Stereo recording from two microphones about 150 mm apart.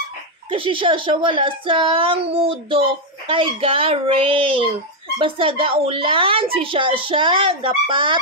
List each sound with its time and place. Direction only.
0.5 s a child's voice: 35° right (ahead or behind)